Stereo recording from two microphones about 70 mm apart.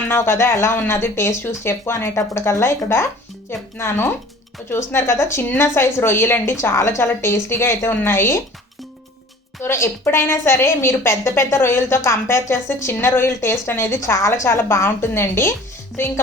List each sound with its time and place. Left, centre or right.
0.1 s a woman's voice: left
9.6 s a woman's voice: left